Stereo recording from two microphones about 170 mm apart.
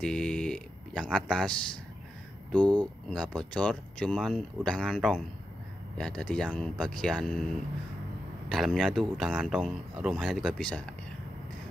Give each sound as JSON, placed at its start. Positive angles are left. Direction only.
{"t": 0.0, "sound": "speech", "side_deg": 5}
{"t": 2.6, "sound": "speech", "side_deg": -25}
{"t": 3.1, "sound": "speech", "side_deg": 5}